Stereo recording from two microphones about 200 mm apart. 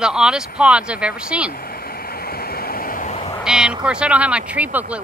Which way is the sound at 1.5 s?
50° left (ahead or behind).